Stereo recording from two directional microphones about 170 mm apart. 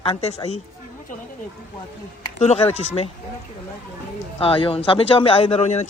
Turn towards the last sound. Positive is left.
turn(degrees=40)  # may be behind; listen again after turning